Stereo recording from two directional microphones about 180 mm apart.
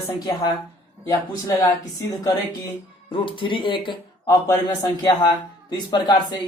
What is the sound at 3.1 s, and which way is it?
Speech, 30° left (ahead or behind).